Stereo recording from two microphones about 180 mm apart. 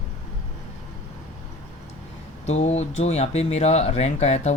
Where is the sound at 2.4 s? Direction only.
40° left (ahead or behind).